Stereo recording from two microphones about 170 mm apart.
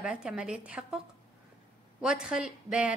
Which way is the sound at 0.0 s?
5° right (ahead or behind).